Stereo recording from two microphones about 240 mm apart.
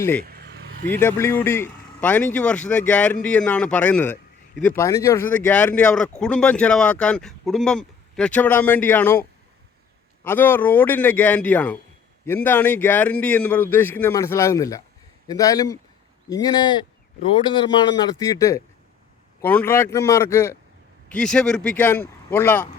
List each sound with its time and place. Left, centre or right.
0.3 s vehicle: right
0.9 s a man's voice: centre
10.2 s a man's voice: centre